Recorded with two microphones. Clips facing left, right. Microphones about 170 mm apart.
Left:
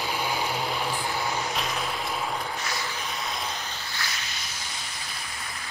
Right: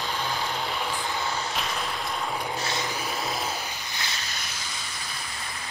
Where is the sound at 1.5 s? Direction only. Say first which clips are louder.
Left 1 dB; centre (ahead or behind).